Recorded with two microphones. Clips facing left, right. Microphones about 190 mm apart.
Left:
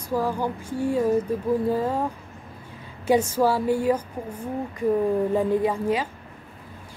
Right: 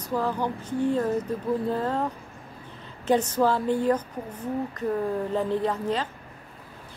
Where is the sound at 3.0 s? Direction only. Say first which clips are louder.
Left 2 dB; 10° left (ahead or behind).